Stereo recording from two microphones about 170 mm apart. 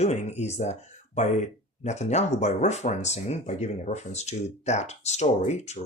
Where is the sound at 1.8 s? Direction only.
40° left (ahead or behind).